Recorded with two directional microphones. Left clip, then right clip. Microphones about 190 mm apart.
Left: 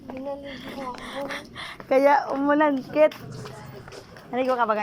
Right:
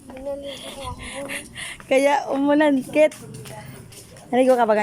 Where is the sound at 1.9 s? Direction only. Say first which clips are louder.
Right 1 dB; 15° right (ahead or behind).